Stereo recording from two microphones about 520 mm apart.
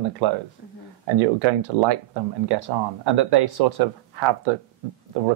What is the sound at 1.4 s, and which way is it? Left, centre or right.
Speech, right.